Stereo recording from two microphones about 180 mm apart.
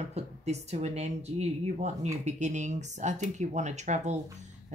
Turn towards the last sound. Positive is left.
turn(degrees=-40)  # may be behind; listen again after turning